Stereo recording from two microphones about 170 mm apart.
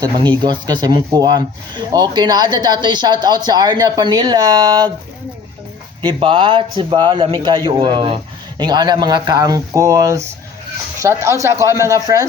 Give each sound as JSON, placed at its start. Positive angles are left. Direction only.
{"t": 0.0, "sound": "speech", "side_deg": -25}
{"t": 6.0, "sound": "speech", "side_deg": -30}